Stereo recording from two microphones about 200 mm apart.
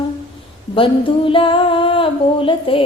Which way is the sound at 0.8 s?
25° left (ahead or behind).